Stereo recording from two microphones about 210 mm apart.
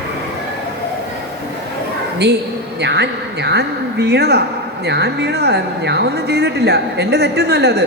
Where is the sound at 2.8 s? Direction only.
55° right (ahead or behind).